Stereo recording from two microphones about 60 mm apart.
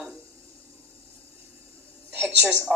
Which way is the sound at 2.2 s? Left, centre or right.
Centre.